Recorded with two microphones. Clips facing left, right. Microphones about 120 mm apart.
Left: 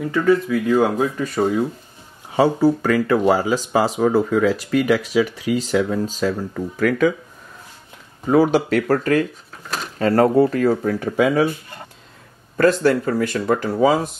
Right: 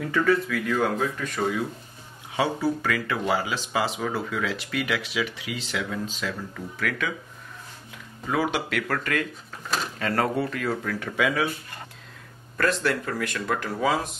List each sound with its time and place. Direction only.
0.0 s speech: 15° left (ahead or behind)
0.5 s speech: 25° left (ahead or behind)
8.3 s speech: 35° left (ahead or behind)
12.5 s speech: 30° left (ahead or behind)